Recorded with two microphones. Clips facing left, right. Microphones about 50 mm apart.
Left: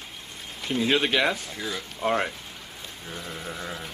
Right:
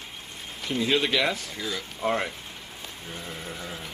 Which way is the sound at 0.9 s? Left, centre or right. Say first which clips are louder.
Left 1 dB; left.